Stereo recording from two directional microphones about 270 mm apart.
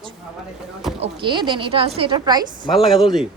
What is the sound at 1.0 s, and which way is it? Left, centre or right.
Speech, centre.